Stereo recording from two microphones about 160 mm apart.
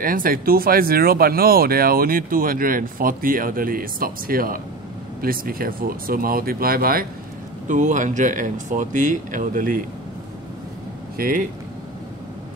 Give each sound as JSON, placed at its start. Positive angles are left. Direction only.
{"t": 0.0, "sound": "speech", "side_deg": -60}
{"t": 7.6, "sound": "speech", "side_deg": -50}
{"t": 11.1, "sound": "speech", "side_deg": -60}